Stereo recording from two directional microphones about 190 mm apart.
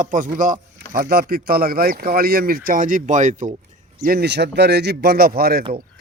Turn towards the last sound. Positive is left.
turn(degrees=-55)  # may be behind; listen again after turning